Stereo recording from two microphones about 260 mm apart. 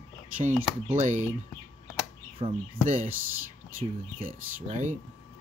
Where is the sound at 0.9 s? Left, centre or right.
Right.